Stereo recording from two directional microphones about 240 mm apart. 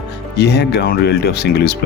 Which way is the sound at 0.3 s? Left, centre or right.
Left.